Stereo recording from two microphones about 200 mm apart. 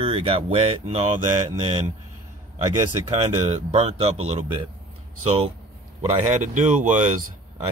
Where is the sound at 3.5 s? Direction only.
30° right (ahead or behind).